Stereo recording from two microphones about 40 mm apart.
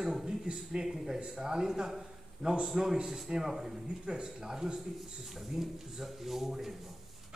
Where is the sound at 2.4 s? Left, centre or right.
Right.